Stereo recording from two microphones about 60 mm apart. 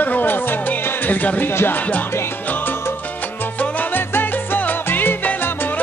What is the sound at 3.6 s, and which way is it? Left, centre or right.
Salsa music, left.